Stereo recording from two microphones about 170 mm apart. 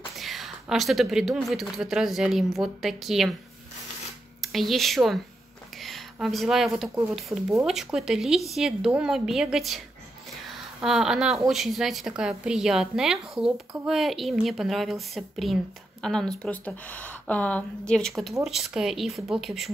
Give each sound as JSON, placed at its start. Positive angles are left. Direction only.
{"t": 0.1, "sound": "a woman's voice", "side_deg": 0}
{"t": 4.4, "sound": "a woman's voice", "side_deg": 0}